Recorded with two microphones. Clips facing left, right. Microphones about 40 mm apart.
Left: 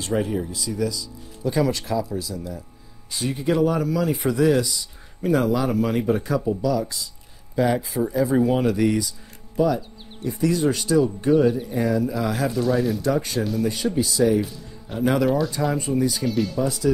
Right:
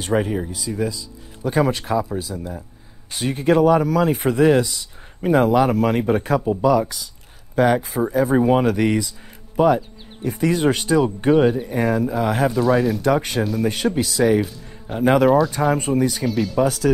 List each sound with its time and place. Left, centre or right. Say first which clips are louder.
0.0 s speech: right 3 dB; right
3.1 s speech: right 5 dB; right
8.6 s speech: right 2 dB; right
12.4 s speech: right 4 dB; centre
13.0 s speech: right 4 dB; right
16.3 s speech: right 1 dB; centre
16.5 s speech: right 4 dB; right